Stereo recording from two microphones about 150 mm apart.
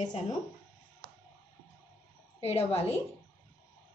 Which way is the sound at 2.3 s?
40° left (ahead or behind).